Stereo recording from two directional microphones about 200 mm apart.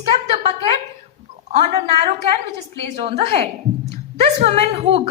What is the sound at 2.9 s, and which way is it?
A woman's voice, 30° right (ahead or behind).